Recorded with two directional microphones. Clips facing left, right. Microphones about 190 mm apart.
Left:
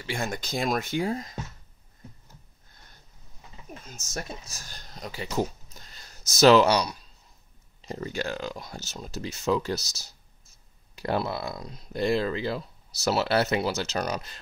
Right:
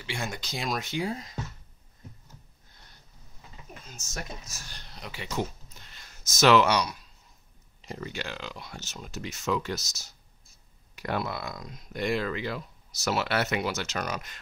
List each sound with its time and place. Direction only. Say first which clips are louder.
0.0 s speech: left 4 dB; 45° left (ahead or behind)
3.9 s speech: left 3 dB; 35° left (ahead or behind)